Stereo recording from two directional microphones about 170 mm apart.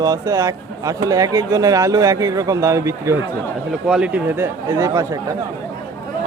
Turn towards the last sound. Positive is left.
turn(degrees=-20)  # may be behind; listen again after turning